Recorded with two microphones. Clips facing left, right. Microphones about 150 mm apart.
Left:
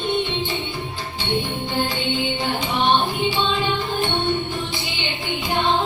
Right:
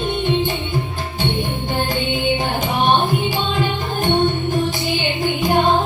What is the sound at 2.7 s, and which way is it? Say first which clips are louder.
Music: right 3 dB; 50° right (ahead or behind).